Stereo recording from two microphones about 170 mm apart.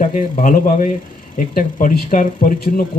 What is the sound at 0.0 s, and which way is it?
Speech, 45° left (ahead or behind).